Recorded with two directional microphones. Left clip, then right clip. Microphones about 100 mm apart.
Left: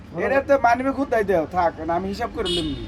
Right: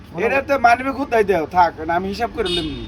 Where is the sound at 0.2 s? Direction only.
20° left (ahead or behind).